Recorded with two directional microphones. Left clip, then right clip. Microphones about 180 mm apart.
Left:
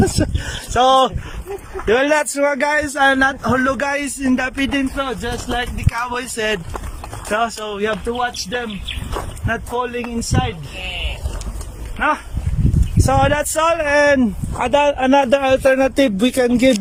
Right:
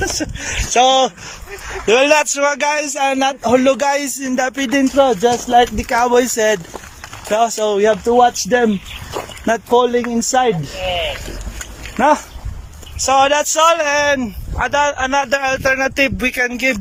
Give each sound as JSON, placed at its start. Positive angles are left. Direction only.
{"t": 0.7, "sound": "speech", "side_deg": 0}
{"t": 2.3, "sound": "speech", "side_deg": 0}
{"t": 7.3, "sound": "speech", "side_deg": -25}
{"t": 9.1, "sound": "speech", "side_deg": -30}
{"t": 11.9, "sound": "speech", "side_deg": -35}
{"t": 13.0, "sound": "speech", "side_deg": 0}
{"t": 14.6, "sound": "speech", "side_deg": 20}